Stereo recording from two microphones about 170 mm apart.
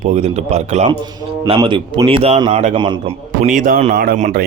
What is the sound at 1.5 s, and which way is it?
A man's voice, 30° right (ahead or behind).